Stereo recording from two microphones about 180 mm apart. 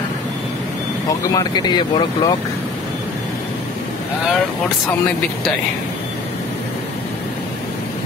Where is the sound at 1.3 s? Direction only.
20° left (ahead or behind).